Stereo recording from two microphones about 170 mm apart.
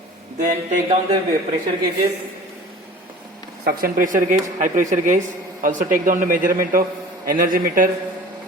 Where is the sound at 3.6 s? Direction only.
60° right (ahead or behind).